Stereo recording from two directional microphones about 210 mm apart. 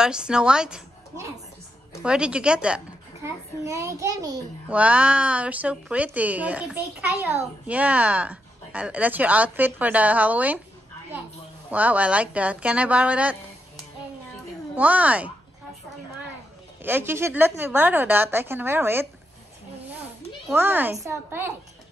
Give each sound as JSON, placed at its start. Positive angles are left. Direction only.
{"t": 0.0, "sound": "a woman's voice", "side_deg": -5}
{"t": 2.0, "sound": "a woman's voice", "side_deg": -5}
{"t": 11.7, "sound": "speech", "side_deg": -5}
{"t": 14.8, "sound": "speech", "side_deg": -5}
{"t": 16.8, "sound": "speech", "side_deg": -10}
{"t": 20.5, "sound": "speech", "side_deg": -10}